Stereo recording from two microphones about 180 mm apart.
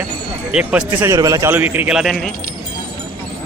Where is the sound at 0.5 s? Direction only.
5° right (ahead or behind).